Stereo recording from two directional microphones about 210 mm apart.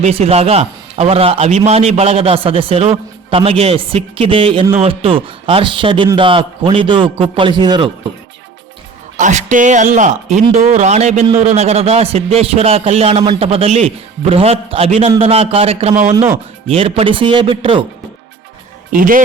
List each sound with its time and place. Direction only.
0.0 s a man's voice: 30° right (ahead or behind)
9.1 s a man's voice: 35° right (ahead or behind)
16.0 s speech: 10° right (ahead or behind)
16.6 s a man's voice: 30° right (ahead or behind)
18.9 s speech: 40° right (ahead or behind)